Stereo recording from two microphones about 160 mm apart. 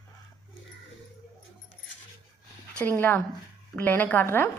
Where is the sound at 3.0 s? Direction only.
10° left (ahead or behind).